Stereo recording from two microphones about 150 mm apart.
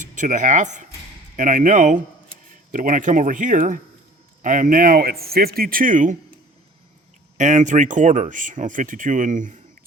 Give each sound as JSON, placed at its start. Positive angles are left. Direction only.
{"t": 0.0, "sound": "speech", "side_deg": -55}
{"t": 7.3, "sound": "speech", "side_deg": -55}